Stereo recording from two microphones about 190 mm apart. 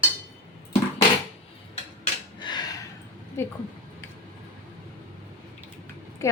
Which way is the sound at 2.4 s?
20° left (ahead or behind).